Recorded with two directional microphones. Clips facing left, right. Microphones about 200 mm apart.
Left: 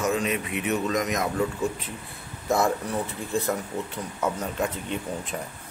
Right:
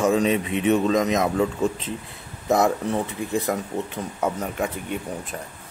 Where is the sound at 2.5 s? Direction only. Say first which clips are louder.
Right 4 dB; 20° right (ahead or behind).